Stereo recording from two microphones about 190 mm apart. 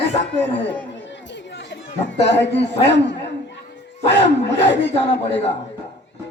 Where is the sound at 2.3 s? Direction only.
65° left (ahead or behind).